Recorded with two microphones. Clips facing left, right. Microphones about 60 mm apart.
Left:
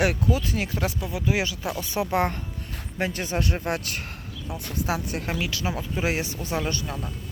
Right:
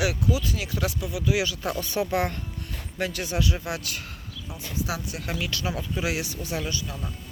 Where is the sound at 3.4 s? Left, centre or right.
Left.